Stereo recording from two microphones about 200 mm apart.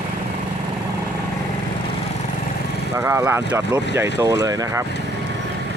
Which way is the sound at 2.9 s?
15° right (ahead or behind).